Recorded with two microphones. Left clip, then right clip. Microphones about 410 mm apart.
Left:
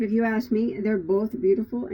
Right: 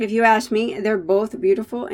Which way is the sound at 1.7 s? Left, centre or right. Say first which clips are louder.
Right 5 dB; right.